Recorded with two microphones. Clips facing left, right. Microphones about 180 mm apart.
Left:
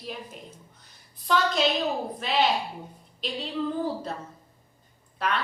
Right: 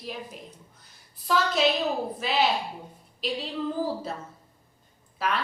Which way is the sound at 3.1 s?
5° right (ahead or behind).